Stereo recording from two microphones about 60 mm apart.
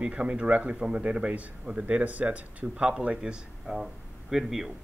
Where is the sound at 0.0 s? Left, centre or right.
Centre.